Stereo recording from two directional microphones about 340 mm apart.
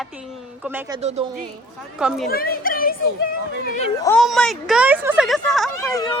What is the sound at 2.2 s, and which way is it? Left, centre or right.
Speech, left.